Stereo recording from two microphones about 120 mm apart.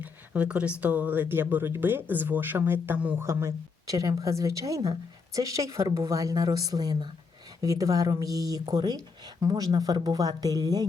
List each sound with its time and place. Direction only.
0.0 s speech: 10° right (ahead or behind); by 10.8 s 30° right (ahead or behind)